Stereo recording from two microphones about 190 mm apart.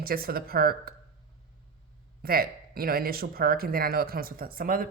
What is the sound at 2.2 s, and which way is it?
Speech, 50° right (ahead or behind).